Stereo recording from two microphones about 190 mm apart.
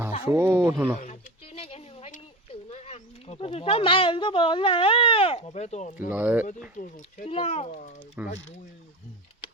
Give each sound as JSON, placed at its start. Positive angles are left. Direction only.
{"t": 0.3, "sound": "speech", "side_deg": -10}
{"t": 0.9, "sound": "a sound", "side_deg": 40}
{"t": 2.6, "sound": "speech", "side_deg": 35}
{"t": 6.1, "sound": "speech", "side_deg": -10}
{"t": 6.7, "sound": "speech", "side_deg": 45}
{"t": 7.3, "sound": "speech", "side_deg": 30}
{"t": 8.2, "sound": "speech", "side_deg": -10}